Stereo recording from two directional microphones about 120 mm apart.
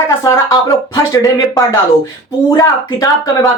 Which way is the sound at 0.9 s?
30° left (ahead or behind).